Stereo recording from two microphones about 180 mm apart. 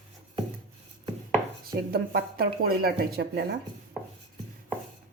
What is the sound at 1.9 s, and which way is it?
Speech, 55° right (ahead or behind).